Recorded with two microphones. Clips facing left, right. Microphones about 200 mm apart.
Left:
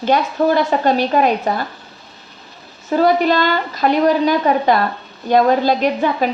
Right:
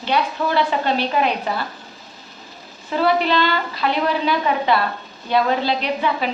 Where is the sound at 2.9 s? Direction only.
45° left (ahead or behind).